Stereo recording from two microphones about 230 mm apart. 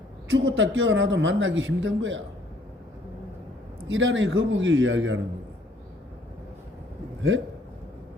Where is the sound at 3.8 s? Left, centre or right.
Right.